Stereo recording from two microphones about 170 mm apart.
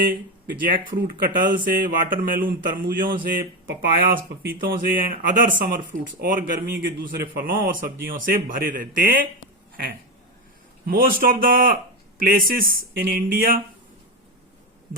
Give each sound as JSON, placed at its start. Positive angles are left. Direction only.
{"t": 0.7, "sound": "speech", "side_deg": -55}
{"t": 10.8, "sound": "speech", "side_deg": -60}